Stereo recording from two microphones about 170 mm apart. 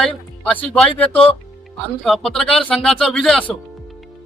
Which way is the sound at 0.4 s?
5° left (ahead or behind).